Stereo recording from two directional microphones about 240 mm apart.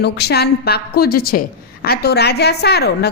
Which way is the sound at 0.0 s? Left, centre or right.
Left.